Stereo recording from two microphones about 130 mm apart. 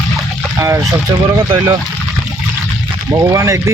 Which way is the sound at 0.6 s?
20° right (ahead or behind).